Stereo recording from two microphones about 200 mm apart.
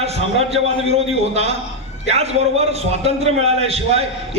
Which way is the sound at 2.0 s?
30° right (ahead or behind).